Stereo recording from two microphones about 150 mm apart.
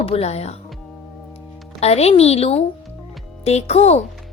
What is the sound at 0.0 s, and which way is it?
Speech, 45° left (ahead or behind).